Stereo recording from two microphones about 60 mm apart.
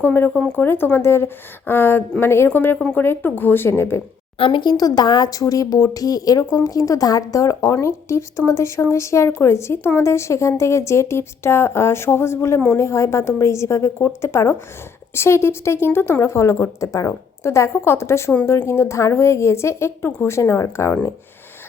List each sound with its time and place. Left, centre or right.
0.0 s speech: left
4.7 s a woman's voice: left
6.4 s speech: left
6.7 s a woman's voice: left